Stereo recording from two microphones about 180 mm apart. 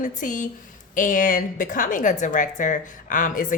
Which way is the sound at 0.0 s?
45° left (ahead or behind).